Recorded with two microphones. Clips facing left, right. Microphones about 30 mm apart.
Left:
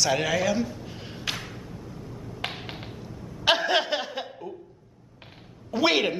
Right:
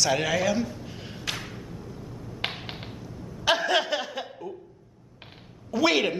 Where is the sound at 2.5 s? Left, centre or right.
Centre.